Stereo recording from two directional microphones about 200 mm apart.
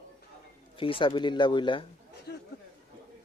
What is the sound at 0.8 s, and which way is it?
Speech, 25° left (ahead or behind).